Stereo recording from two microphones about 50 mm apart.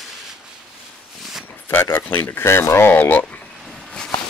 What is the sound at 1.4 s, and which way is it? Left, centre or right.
Speech, left.